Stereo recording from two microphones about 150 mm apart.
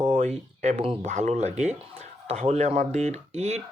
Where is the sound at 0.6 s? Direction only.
45° right (ahead or behind).